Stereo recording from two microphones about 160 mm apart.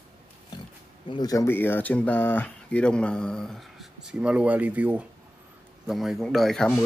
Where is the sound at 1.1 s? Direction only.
20° left (ahead or behind).